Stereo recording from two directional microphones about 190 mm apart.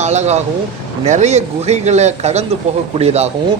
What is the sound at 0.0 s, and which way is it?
Speech, 35° right (ahead or behind).